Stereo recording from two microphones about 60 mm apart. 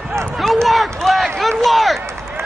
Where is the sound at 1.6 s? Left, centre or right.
Centre.